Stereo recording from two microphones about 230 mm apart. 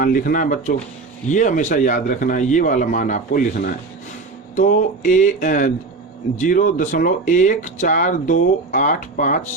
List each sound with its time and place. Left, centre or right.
0.0 s speech: left